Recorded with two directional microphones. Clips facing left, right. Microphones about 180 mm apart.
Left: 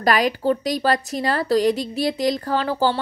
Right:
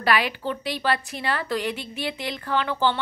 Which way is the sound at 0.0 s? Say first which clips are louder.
Left 5 dB; 40° left (ahead or behind).